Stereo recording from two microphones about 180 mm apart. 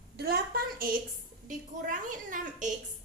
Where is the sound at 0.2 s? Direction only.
60° right (ahead or behind).